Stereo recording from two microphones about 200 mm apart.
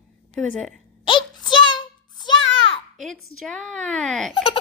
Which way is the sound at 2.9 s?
Centre (ahead or behind).